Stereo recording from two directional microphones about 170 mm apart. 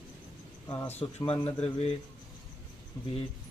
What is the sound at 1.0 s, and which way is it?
Speech, 35° left (ahead or behind).